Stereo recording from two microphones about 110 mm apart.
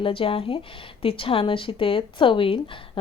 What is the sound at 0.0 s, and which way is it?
A woman's voice, 55° left (ahead or behind).